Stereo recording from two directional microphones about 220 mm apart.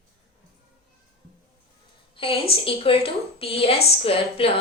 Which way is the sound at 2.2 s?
25° left (ahead or behind).